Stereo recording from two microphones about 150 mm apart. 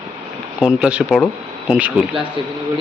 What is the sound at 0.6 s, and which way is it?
Speech, 5° right (ahead or behind).